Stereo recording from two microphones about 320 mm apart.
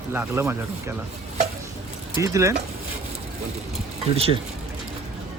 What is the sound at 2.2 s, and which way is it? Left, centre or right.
Speech, centre.